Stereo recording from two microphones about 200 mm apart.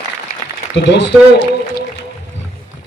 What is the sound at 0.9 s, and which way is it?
Speech, 60° left (ahead or behind).